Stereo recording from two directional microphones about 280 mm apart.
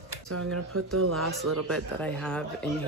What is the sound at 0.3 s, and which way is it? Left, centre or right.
Speech, right.